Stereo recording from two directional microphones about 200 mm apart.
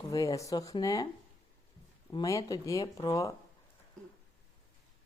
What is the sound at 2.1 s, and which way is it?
Speech, 20° left (ahead or behind).